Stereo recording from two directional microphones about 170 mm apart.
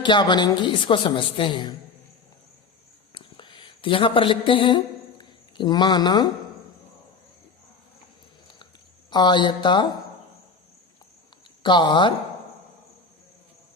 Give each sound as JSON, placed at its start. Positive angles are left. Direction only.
{"t": 0.0, "sound": "a woman's voice", "side_deg": 25}
{"t": 3.2, "sound": "a sound", "side_deg": 30}
{"t": 9.0, "sound": "a woman's voice", "side_deg": 25}
{"t": 11.6, "sound": "a woman's voice", "side_deg": 25}